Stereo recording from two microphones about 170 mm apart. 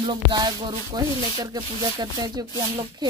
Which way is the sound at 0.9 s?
25° right (ahead or behind).